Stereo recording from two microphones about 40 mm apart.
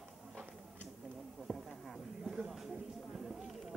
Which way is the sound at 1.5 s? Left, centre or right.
Centre.